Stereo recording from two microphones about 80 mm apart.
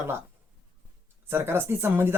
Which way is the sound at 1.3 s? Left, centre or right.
Right.